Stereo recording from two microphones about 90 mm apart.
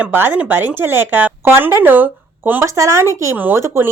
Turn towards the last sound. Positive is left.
turn(degrees=-25)  # may be behind; listen again after turning